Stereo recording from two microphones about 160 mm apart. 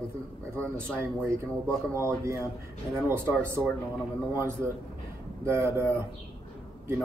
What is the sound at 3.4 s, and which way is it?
Speech, 15° right (ahead or behind).